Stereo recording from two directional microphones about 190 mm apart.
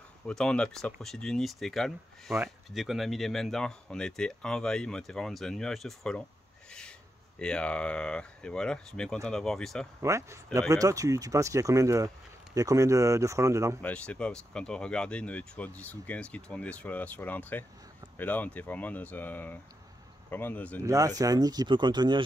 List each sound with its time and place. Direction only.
0.3 s speech: 5° left (ahead or behind)
7.3 s speech: 5° left (ahead or behind)
10.0 s speech: 15° right (ahead or behind)
13.8 s speech: 5° left (ahead or behind)
20.8 s speech: 15° right (ahead or behind)